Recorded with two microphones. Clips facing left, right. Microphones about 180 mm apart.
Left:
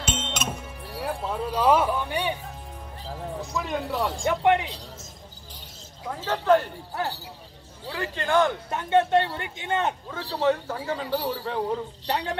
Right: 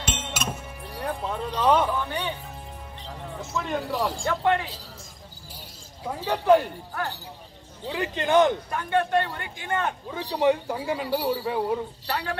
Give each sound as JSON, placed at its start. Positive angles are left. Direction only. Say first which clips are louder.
{"t": 0.0, "sound": "music", "louder": "left 1 dB", "side_deg": -5}
{"t": 3.4, "sound": "speech", "louder": "right 2 dB", "side_deg": 0}
{"t": 4.2, "sound": "a man's voice", "louder": "left 4 dB", "side_deg": 20}
{"t": 6.0, "sound": "a man's voice", "louder": "right 2 dB", "side_deg": -15}
{"t": 7.8, "sound": "a man's voice", "louder": "right 3 dB", "side_deg": -20}
{"t": 8.6, "sound": "a man's voice", "louder": "left 3 dB", "side_deg": 25}
{"t": 10.1, "sound": "a man's voice", "louder": "right 3 dB", "side_deg": -15}
{"t": 12.1, "sound": "a man's voice", "louder": "left 3 dB", "side_deg": 20}